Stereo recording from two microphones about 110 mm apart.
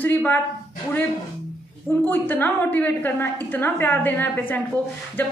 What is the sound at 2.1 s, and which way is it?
A woman's voice, 15° left (ahead or behind).